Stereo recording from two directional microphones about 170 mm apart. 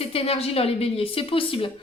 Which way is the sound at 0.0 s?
35° left (ahead or behind).